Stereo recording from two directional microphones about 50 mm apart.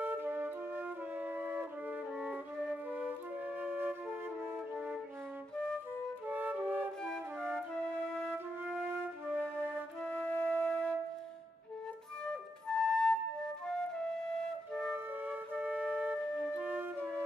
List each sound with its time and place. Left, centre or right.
0.0 s music: right
6.2 s flute: right
7.0 s flute: centre
8.8 s music: right
10.0 s music: left
12.3 s flute: centre
15.1 s music: right
16.6 s flute: right